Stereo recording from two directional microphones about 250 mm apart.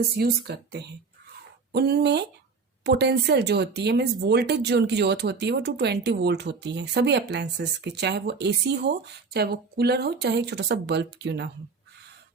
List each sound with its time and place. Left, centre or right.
0.2 s speech: right